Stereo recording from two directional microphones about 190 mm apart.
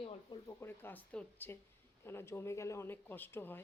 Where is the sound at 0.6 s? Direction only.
10° left (ahead or behind).